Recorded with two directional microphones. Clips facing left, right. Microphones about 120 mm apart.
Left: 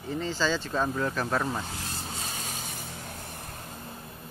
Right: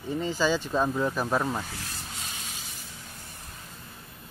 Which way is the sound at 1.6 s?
25° left (ahead or behind).